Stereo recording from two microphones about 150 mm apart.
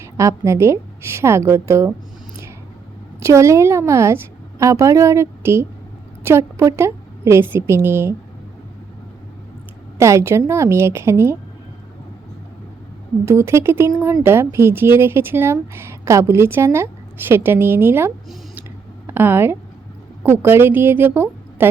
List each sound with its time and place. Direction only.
0.0 s speech: 20° right (ahead or behind)
3.2 s a woman's voice: 20° right (ahead or behind)
10.0 s a woman's voice: 20° right (ahead or behind)
13.2 s speech: 15° right (ahead or behind)